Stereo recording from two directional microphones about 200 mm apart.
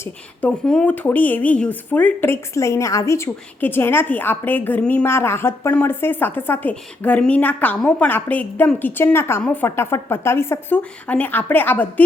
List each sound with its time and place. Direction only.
0.0 s speech: 5° left (ahead or behind)